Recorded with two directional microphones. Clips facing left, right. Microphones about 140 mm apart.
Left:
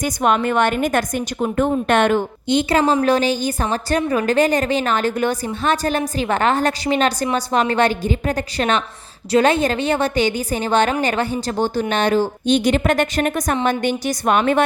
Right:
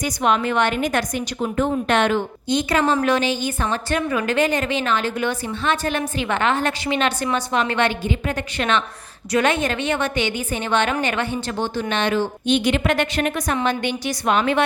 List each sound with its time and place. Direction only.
0.0 s a woman's voice: 45° left (ahead or behind)
2.5 s a woman's voice: 30° left (ahead or behind); by 14.6 s 45° left (ahead or behind)